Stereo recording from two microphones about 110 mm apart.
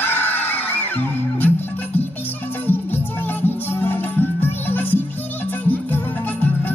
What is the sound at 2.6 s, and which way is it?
Music, 20° left (ahead or behind).